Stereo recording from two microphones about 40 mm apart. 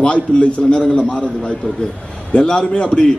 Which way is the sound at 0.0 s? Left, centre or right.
Left.